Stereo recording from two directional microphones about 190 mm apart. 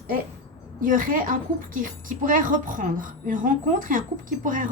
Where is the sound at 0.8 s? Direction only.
45° right (ahead or behind).